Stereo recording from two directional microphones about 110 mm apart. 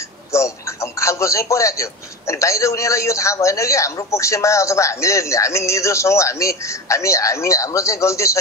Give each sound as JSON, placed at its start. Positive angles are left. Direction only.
{"t": 0.3, "sound": "speech", "side_deg": 25}